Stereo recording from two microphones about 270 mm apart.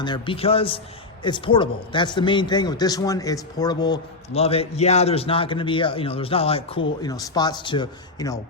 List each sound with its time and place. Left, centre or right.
0.0 s a man's voice: centre